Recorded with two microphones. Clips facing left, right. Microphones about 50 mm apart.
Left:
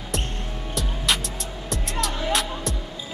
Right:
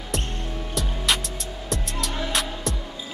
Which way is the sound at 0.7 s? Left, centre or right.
Centre.